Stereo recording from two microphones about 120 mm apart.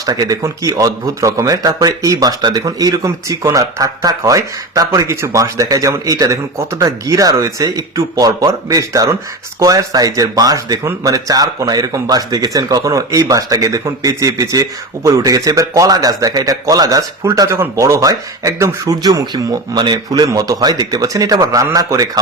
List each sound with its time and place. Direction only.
0.0 s speech: 30° right (ahead or behind)